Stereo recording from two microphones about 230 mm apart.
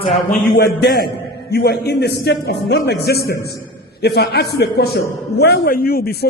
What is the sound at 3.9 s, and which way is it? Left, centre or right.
A man's voice, left.